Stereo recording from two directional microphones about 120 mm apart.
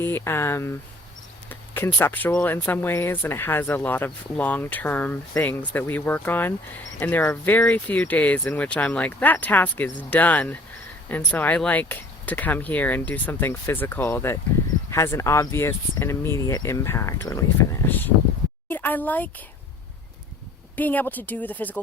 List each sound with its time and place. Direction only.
0.0 s speech: 20° left (ahead or behind)
17.8 s a sound: 15° left (ahead or behind)
18.7 s speech: 15° left (ahead or behind)
20.7 s speech: 15° left (ahead or behind)